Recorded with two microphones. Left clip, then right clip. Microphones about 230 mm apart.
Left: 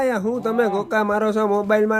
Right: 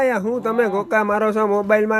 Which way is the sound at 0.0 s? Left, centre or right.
Centre.